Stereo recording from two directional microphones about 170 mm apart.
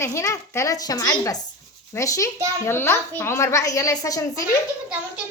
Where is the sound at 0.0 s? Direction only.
15° left (ahead or behind).